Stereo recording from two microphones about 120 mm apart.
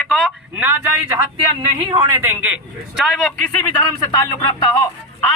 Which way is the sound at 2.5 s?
5° right (ahead or behind).